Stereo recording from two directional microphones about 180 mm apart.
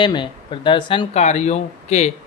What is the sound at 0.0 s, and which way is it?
Speech, 25° left (ahead or behind).